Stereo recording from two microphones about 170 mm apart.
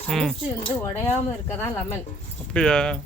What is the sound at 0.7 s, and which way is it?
Speech, 15° left (ahead or behind).